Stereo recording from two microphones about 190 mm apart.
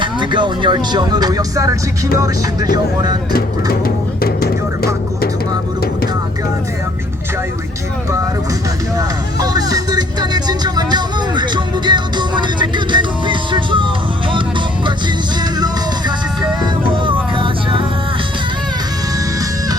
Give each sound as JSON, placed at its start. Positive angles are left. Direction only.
{"t": 0.0, "sound": "speech", "side_deg": -25}
{"t": 2.1, "sound": "music", "side_deg": -20}
{"t": 2.7, "sound": "speech", "side_deg": -20}
{"t": 3.3, "sound": "music", "side_deg": 50}
{"t": 9.0, "sound": "music", "side_deg": -20}
{"t": 17.1, "sound": "music", "side_deg": -25}